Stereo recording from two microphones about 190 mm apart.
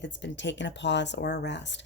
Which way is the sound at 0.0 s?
70° left (ahead or behind).